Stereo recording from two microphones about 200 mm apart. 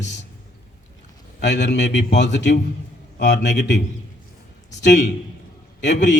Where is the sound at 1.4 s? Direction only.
60° left (ahead or behind).